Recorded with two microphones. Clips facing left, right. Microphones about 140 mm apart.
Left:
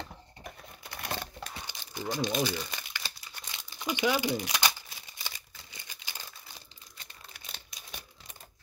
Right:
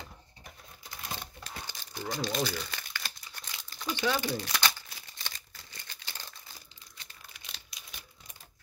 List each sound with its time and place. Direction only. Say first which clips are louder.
0.4 s typing: left 6 dB; 65° left (ahead or behind)
1.7 s crumpling: left 2 dB; 15° left (ahead or behind)
7.5 s a sound: left 4 dB; 45° left (ahead or behind)